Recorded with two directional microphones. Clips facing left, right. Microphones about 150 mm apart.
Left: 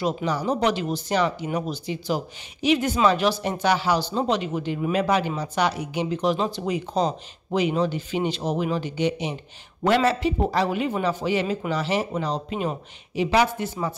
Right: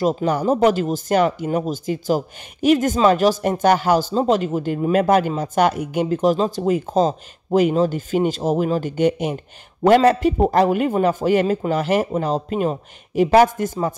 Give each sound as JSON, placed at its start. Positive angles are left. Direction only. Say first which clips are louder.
{"t": 0.0, "sound": "a man's voice", "louder": "right 6 dB", "side_deg": -50}